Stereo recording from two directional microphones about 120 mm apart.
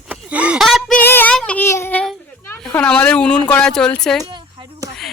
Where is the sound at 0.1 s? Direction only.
10° right (ahead or behind).